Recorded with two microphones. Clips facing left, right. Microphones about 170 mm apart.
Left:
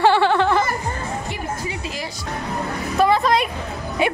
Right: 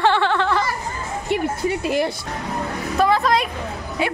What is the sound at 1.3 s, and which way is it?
Music, 60° right (ahead or behind).